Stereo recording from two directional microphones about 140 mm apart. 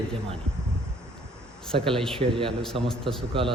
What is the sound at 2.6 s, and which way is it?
Speech, 5° left (ahead or behind).